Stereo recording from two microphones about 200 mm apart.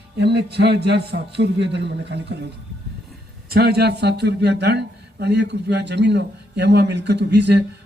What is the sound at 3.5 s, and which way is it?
A man's voice, 50° right (ahead or behind).